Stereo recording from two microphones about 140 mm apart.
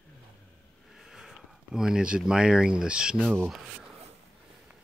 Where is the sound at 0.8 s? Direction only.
Centre (ahead or behind).